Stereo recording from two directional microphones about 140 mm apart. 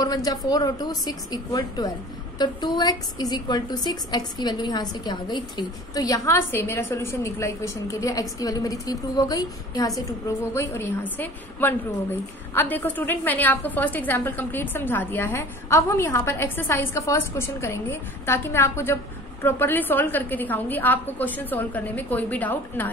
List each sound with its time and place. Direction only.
0.0 s a woman's voice: 25° left (ahead or behind); by 22.8 s 10° left (ahead or behind)